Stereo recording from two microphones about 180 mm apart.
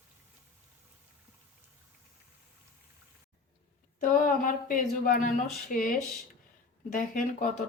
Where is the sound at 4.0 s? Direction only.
50° left (ahead or behind).